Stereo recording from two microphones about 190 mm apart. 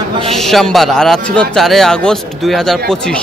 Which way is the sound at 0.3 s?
Centre (ahead or behind).